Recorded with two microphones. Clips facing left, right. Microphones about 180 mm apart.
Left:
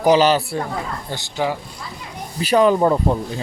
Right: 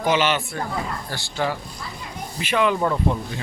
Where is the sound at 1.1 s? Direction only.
15° left (ahead or behind).